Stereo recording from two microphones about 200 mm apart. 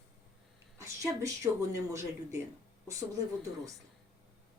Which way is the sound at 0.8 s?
15° right (ahead or behind).